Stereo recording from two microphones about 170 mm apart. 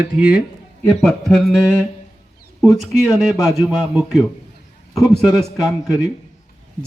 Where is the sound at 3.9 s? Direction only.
Centre (ahead or behind).